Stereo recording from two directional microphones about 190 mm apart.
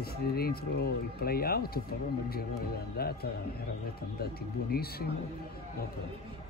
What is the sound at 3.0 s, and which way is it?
Speech, 55° left (ahead or behind).